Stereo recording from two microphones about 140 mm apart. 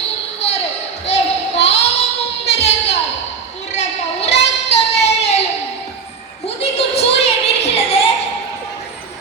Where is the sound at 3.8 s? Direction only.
50° left (ahead or behind).